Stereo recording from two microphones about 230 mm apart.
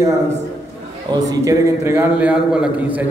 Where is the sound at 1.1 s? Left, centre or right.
Centre.